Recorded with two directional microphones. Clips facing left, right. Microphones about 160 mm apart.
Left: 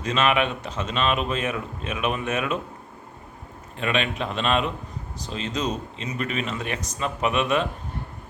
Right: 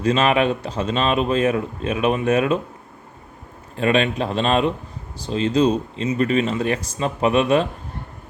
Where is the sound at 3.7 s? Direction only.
35° right (ahead or behind).